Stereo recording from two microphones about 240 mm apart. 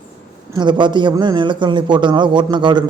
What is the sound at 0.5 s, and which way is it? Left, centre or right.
A man's voice, centre.